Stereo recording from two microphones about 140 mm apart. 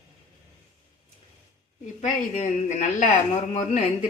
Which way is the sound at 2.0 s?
55° left (ahead or behind).